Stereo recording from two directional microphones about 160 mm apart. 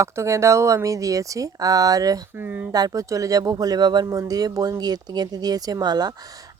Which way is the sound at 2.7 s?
25° right (ahead or behind).